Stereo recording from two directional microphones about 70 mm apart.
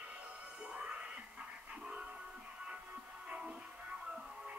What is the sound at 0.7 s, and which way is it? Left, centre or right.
Music, centre.